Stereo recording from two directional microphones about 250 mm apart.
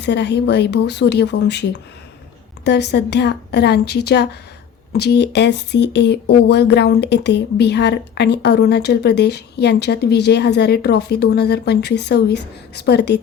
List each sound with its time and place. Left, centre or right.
0.0 s a woman's voice: left
2.6 s a woman's voice: left